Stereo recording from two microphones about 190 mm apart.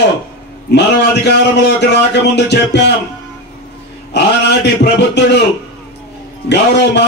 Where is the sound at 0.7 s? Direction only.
60° left (ahead or behind).